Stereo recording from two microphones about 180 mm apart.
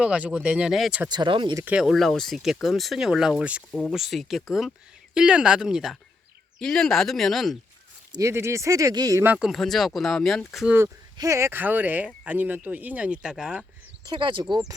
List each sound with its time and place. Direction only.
0.0 s speech: 5° right (ahead or behind)
1.1 s speech: 25° right (ahead or behind)
1.6 s speech: 5° right (ahead or behind)
8.1 s speech: 15° right (ahead or behind)
10.8 s speech: 15° right (ahead or behind)
14.0 s speech: 25° right (ahead or behind)